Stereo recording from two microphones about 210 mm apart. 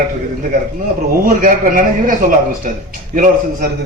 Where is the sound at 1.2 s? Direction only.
40° right (ahead or behind).